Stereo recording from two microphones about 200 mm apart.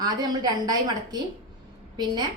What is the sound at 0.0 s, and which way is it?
A woman's voice, 20° right (ahead or behind).